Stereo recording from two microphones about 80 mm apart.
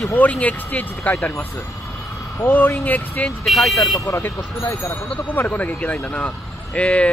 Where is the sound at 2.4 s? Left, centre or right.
Left.